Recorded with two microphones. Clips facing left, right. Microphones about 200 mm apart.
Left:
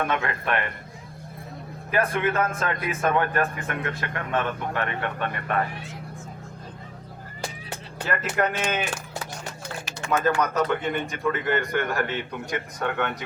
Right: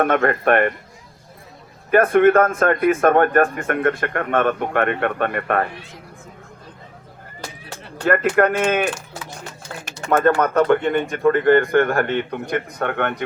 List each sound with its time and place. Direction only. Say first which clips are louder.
0.0 s speech: right 9 dB; 55° right (ahead or behind)
1.9 s speech: right 11 dB; 55° right (ahead or behind)
8.0 s speech: right 9 dB; 55° right (ahead or behind)
9.8 s a man's voice: right 7 dB; 50° right (ahead or behind)